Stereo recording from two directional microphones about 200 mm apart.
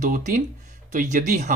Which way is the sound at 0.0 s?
40° right (ahead or behind).